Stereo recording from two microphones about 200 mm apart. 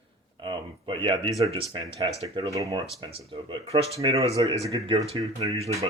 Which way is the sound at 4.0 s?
15° right (ahead or behind).